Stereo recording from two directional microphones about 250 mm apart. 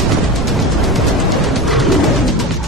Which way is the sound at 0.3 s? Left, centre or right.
Centre.